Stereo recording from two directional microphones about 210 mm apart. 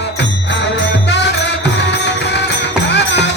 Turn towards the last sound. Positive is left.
turn(degrees=55)  # may be behind; listen again after turning